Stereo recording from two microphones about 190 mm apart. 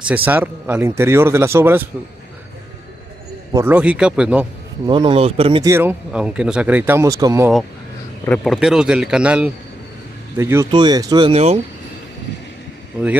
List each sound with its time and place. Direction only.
0.0 s speech: 10° right (ahead or behind)
3.5 s speech: 10° right (ahead or behind)
4.8 s speech: 25° right (ahead or behind)
5.7 s speech: 10° right (ahead or behind)
8.3 s speech: centre (ahead or behind); by 11.6 s 30° right (ahead or behind)